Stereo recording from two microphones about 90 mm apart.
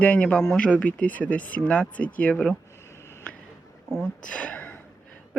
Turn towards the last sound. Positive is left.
turn(degrees=20)  # may be behind; listen again after turning